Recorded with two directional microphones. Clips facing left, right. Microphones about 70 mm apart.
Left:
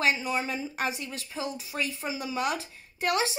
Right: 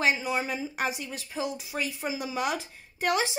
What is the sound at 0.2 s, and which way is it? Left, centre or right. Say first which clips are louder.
A child's voice: right 1 dB; centre.